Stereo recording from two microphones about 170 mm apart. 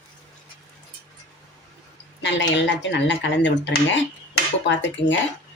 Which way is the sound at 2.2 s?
90° left.